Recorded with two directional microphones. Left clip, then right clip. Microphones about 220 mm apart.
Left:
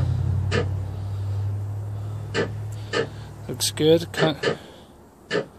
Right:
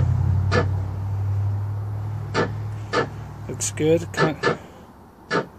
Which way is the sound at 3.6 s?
75° left (ahead or behind).